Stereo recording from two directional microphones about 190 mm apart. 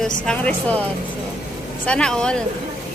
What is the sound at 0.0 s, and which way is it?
Speech, 5° left (ahead or behind).